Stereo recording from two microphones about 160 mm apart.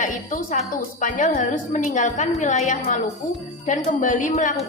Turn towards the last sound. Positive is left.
turn(degrees=50)  # may be behind; listen again after turning